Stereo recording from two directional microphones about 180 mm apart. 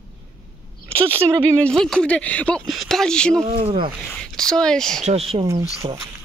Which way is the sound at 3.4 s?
35° right (ahead or behind).